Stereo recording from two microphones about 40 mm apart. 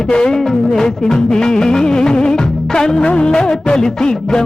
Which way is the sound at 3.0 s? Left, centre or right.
Left.